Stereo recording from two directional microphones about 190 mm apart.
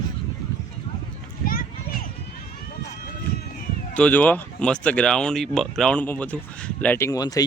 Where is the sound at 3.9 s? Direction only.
10° left (ahead or behind).